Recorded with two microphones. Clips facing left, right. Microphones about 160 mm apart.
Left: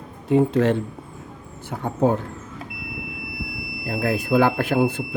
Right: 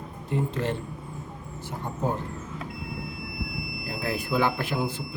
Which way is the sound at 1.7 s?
70° left (ahead or behind).